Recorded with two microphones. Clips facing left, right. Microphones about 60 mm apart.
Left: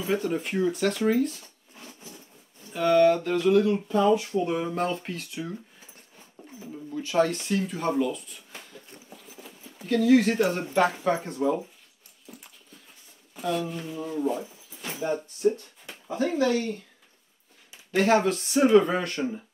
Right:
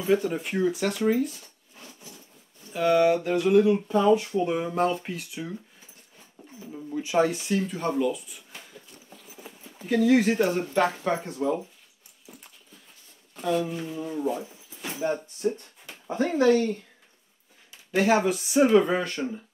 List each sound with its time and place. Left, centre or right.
0.0 s speech: centre
2.7 s speech: centre
6.7 s speech: centre
8.5 s a sound: centre
9.8 s speech: centre
12.3 s dog: centre
13.4 s speech: centre
16.1 s speech: right
17.9 s speech: centre